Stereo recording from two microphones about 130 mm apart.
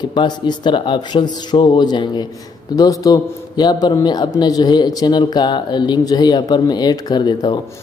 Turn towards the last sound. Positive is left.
turn(degrees=35)  # may be behind; listen again after turning